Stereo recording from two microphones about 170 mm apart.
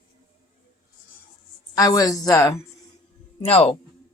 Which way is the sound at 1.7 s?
20° left (ahead or behind).